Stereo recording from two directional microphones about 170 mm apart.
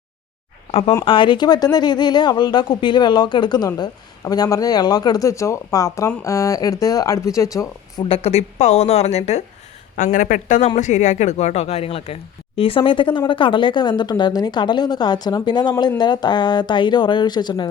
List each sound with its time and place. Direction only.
0.7 s speech: 35° left (ahead or behind); by 8.0 s 20° left (ahead or behind)
8.0 s speech: 35° left (ahead or behind)
9.9 s speech: 55° left (ahead or behind); by 17.7 s 25° left (ahead or behind)